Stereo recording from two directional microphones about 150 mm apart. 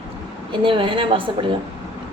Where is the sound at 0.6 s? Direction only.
35° right (ahead or behind).